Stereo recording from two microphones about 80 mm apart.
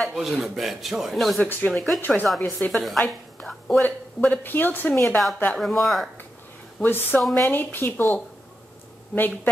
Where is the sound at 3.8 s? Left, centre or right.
Left.